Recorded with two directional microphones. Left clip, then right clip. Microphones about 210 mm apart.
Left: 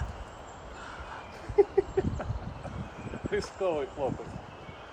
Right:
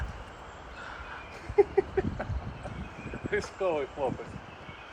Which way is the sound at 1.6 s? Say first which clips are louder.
Even; centre (ahead or behind).